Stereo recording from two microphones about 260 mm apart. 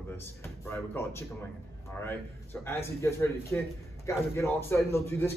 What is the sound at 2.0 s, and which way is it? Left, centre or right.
A man's voice, centre.